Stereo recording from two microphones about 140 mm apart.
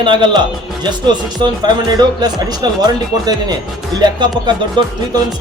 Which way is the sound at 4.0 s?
30° right (ahead or behind).